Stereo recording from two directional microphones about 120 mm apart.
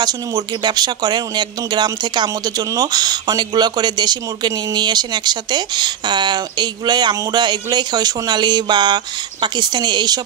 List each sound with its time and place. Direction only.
0.0 s speech: 35° right (ahead or behind)